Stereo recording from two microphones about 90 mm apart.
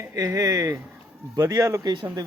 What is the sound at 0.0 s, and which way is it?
Speech, 35° right (ahead or behind).